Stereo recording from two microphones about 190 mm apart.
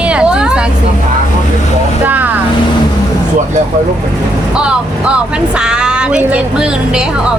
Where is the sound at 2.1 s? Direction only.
10° right (ahead or behind).